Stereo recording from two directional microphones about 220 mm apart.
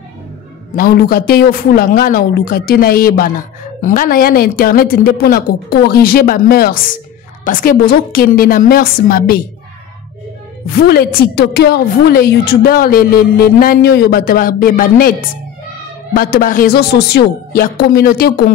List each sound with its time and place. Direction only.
0.7 s a woman's voice: 40° left (ahead or behind)
10.8 s a woman's voice: 45° left (ahead or behind)